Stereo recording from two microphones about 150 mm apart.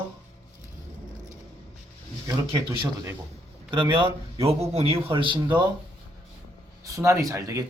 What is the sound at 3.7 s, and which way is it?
A man's voice, 35° right (ahead or behind).